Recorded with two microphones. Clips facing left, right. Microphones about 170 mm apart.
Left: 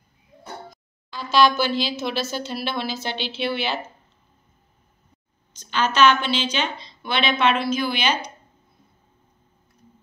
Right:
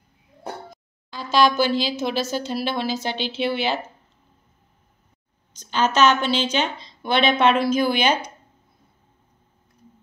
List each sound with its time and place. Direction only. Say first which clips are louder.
1.1 s a woman's voice: even; 45° right (ahead or behind)
5.6 s a woman's voice: even; 45° right (ahead or behind)